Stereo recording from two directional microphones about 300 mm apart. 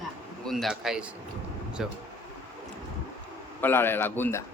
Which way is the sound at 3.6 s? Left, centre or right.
Centre.